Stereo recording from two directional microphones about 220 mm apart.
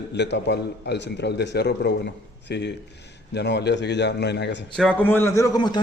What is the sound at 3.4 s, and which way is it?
A man's voice, 50° left (ahead or behind).